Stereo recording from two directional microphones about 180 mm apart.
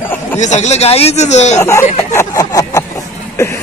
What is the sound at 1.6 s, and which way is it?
Speech, 15° left (ahead or behind).